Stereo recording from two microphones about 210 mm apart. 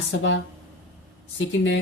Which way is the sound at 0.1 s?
65° left (ahead or behind).